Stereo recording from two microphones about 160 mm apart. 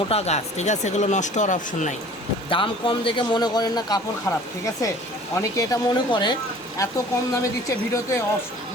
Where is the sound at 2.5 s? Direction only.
30° left (ahead or behind).